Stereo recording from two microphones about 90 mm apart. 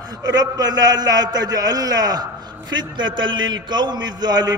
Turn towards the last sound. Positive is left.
turn(degrees=-50)  # may be behind; listen again after turning